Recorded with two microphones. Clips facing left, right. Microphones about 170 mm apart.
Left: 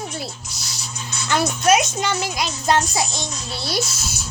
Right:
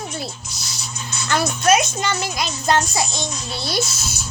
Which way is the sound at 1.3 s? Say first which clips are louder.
Even; 15° left (ahead or behind).